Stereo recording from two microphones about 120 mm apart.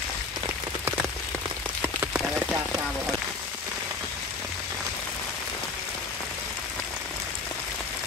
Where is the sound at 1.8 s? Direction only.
15° right (ahead or behind).